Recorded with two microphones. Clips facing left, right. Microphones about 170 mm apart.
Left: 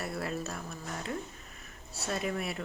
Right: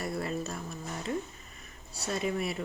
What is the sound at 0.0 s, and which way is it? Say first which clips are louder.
Speech: right 2 dB; centre (ahead or behind).